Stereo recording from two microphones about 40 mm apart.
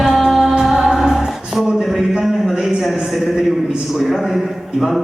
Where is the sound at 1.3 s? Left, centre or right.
Centre.